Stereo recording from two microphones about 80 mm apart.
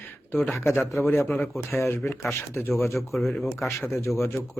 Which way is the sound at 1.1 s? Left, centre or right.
Left.